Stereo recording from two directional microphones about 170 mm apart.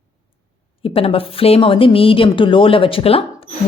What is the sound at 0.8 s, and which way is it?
Speech, 35° left (ahead or behind).